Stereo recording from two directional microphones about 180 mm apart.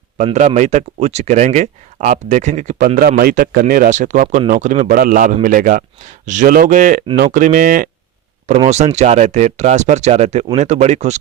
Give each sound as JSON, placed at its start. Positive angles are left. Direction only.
{"t": 0.3, "sound": "speech", "side_deg": -40}